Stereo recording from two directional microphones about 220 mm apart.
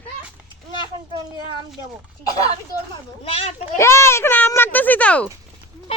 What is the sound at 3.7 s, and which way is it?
A child's voice, 10° left (ahead or behind).